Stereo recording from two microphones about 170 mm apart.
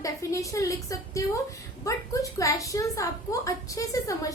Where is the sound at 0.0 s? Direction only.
20° left (ahead or behind).